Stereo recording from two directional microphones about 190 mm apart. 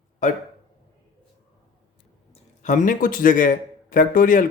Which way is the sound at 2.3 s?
40° left (ahead or behind).